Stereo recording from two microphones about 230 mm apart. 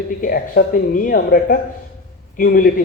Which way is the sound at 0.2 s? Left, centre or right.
Left.